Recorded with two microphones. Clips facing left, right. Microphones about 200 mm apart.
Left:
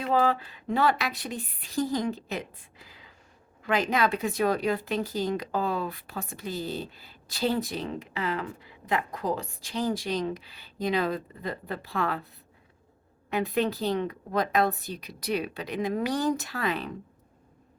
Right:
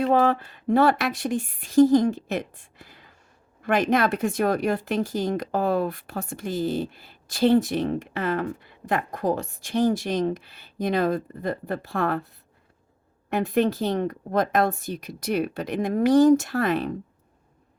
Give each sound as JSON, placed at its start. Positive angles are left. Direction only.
{"t": 0.0, "sound": "speech", "side_deg": -50}
{"t": 13.3, "sound": "speech", "side_deg": -50}